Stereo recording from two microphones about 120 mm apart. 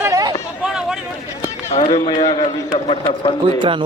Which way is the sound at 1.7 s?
70° left (ahead or behind).